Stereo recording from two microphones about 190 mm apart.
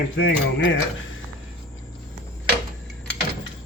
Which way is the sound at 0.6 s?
90° left.